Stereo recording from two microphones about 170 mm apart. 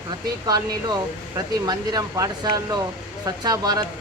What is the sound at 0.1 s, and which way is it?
Speech, 25° right (ahead or behind).